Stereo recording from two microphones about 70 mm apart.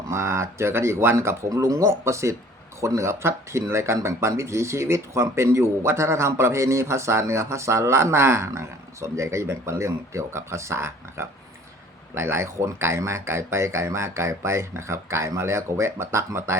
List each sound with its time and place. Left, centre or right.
0.1 s speech: right